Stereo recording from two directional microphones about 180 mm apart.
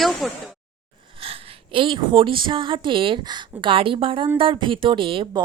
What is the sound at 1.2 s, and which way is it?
A woman's voice, 30° right (ahead or behind).